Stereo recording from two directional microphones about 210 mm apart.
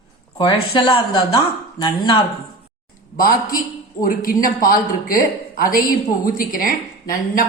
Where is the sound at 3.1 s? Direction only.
40° left (ahead or behind).